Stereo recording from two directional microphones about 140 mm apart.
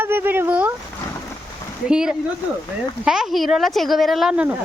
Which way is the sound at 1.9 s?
5° right (ahead or behind).